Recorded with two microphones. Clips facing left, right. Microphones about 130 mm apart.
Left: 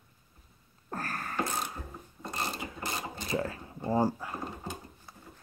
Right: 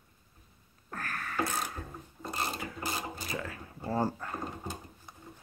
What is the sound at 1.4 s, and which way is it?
Music, 10° left (ahead or behind).